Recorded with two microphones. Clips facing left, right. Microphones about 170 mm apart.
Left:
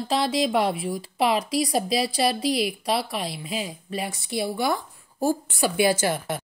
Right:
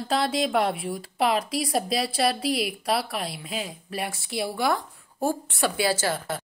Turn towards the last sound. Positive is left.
turn(degrees=15)  # may be behind; listen again after turning